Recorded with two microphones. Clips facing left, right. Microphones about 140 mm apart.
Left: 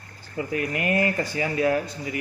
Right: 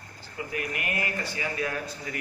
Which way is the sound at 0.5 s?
30° left (ahead or behind).